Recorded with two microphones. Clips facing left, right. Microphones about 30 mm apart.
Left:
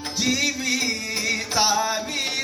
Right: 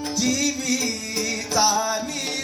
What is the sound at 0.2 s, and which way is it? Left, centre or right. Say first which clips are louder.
Music: left 1 dB; left.